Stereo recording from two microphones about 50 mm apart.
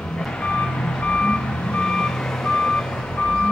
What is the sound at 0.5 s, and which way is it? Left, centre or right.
Reversing beeps, left.